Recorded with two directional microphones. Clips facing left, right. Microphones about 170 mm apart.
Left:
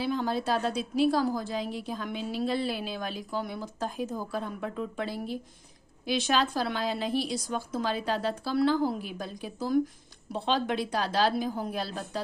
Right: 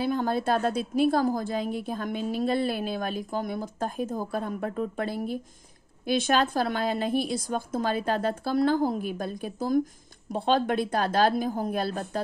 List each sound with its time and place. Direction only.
0.0 s a woman's voice: 50° right (ahead or behind)